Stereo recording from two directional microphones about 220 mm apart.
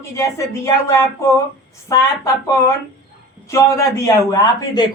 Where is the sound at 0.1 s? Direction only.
15° left (ahead or behind).